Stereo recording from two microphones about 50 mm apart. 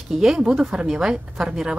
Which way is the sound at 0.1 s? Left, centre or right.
Centre.